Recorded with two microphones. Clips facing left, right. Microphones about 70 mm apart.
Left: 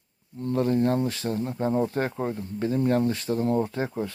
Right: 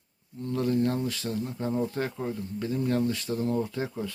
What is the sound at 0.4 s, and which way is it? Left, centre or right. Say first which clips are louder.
Speech: left 3 dB; left.